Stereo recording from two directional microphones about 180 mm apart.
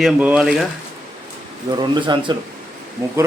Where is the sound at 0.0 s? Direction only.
5° right (ahead or behind).